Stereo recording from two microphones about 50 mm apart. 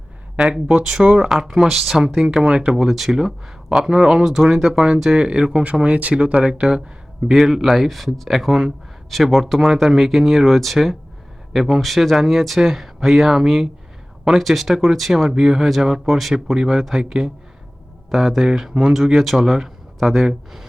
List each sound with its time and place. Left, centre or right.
0.9 s speech: centre
1.5 s speech: centre
4.2 s speech: centre
7.3 s speech: centre